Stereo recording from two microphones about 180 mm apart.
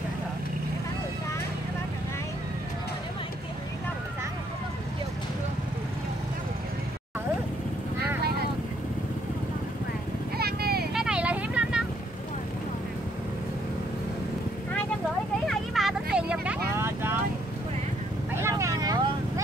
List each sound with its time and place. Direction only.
10.3 s a sound: 60° right (ahead or behind)
10.9 s vehicle: 5° right (ahead or behind)
15.4 s vehicle: centre (ahead or behind)
18.3 s vehicle: 15° right (ahead or behind)